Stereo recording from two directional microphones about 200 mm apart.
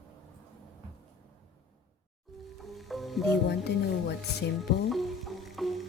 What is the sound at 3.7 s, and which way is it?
Speech, 60° left (ahead or behind).